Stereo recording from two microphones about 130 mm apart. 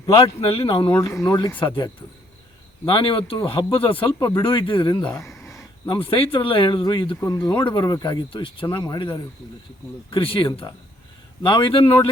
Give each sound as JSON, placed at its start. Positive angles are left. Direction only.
{"t": 0.0, "sound": "speech", "side_deg": 45}
{"t": 0.9, "sound": "speech", "side_deg": 20}
{"t": 1.5, "sound": "speech", "side_deg": 35}
{"t": 4.2, "sound": "speech", "side_deg": 20}
{"t": 4.4, "sound": "speech", "side_deg": 40}
{"t": 5.1, "sound": "a sound", "side_deg": 20}
{"t": 5.9, "sound": "speech", "side_deg": 45}
{"t": 7.2, "sound": "speech", "side_deg": 20}
{"t": 7.6, "sound": "speech", "side_deg": 35}
{"t": 10.1, "sound": "speech", "side_deg": 45}